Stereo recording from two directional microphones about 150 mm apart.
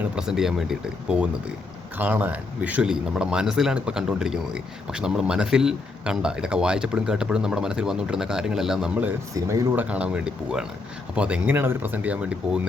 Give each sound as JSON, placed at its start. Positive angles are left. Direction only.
{"t": 0.0, "sound": "speech", "side_deg": -5}
{"t": 9.3, "sound": "speech", "side_deg": -20}
{"t": 9.8, "sound": "speech", "side_deg": -10}